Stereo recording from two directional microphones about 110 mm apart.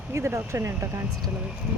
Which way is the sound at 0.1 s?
25° right (ahead or behind).